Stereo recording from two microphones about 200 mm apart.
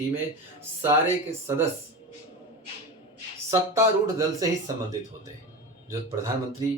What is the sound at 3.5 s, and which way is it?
Speech, 15° right (ahead or behind).